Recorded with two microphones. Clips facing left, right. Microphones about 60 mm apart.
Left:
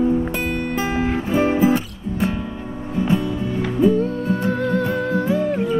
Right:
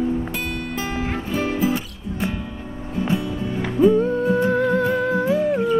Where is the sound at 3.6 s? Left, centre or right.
Centre.